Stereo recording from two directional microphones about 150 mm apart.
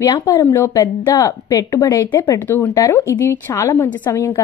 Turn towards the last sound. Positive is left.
turn(degrees=20)  # may be behind; listen again after turning